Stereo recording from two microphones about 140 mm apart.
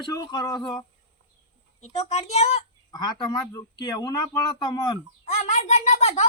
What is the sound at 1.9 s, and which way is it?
Speech, 50° left (ahead or behind).